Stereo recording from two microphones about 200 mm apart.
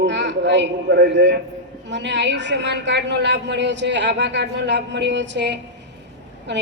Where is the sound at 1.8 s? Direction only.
65° right (ahead or behind).